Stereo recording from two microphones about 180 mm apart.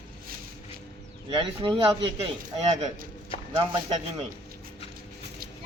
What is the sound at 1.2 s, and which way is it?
Speech, 25° right (ahead or behind).